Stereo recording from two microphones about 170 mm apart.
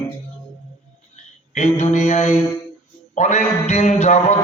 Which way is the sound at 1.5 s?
40° left (ahead or behind).